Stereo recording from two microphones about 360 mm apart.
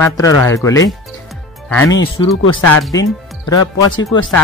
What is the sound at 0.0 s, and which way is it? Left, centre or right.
Speech, centre.